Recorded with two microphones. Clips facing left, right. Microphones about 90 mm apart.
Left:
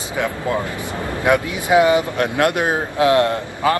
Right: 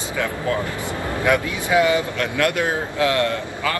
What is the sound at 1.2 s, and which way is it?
Speech, 20° left (ahead or behind).